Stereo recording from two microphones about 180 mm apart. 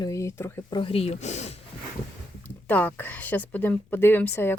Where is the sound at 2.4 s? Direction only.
10° left (ahead or behind).